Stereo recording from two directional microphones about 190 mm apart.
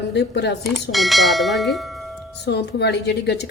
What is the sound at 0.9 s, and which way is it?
Speech, centre (ahead or behind).